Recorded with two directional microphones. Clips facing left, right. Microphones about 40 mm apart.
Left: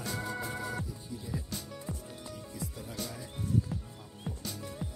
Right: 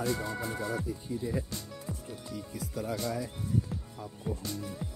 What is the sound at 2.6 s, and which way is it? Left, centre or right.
Speech, right.